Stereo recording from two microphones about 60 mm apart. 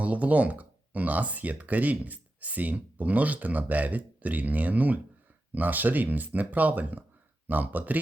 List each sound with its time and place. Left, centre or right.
0.0 s speech: right